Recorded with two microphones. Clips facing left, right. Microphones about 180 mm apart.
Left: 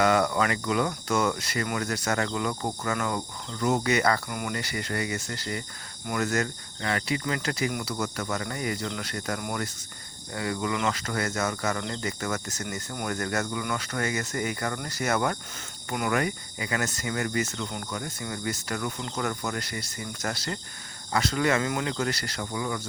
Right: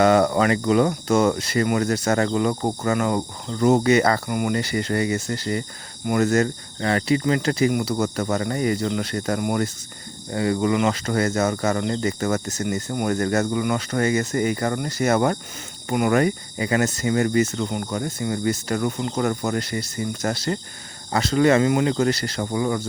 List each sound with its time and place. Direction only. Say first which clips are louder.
0.0 s speech: right 6 dB; 30° right (ahead or behind)
7.9 s speech: right 8 dB; 35° right (ahead or behind)